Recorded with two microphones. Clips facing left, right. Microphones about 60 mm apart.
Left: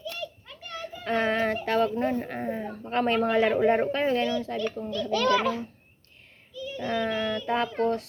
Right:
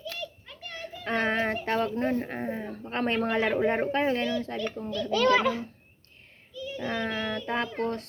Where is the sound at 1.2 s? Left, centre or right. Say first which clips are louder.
Left 1 dB; right.